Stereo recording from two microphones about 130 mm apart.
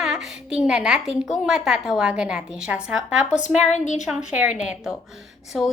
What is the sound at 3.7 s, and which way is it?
Speech, 70° left (ahead or behind).